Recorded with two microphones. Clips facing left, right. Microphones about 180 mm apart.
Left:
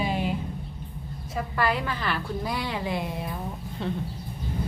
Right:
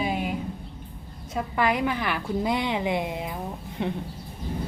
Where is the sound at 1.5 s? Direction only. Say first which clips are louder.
Right 3 dB; 15° right (ahead or behind).